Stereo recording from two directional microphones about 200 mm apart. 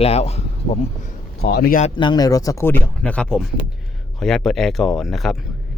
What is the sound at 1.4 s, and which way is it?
Speech, 50° left (ahead or behind).